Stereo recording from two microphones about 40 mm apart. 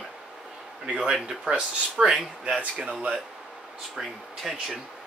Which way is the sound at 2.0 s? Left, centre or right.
Centre.